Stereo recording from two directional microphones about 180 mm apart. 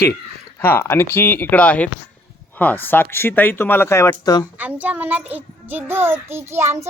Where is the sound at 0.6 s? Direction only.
15° left (ahead or behind).